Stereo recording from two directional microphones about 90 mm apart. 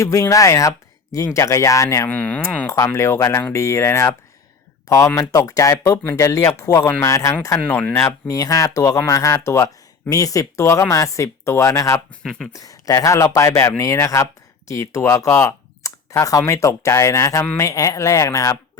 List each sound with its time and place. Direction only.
0.0 s speech: 35° left (ahead or behind)
2.0 s speech: 15° left (ahead or behind)
2.6 s speech: 40° left (ahead or behind)
7.7 s speech: 20° left (ahead or behind)
8.0 s speech: 40° left (ahead or behind)
12.2 s speech: 5° left (ahead or behind)
12.5 s speech: 40° left (ahead or behind)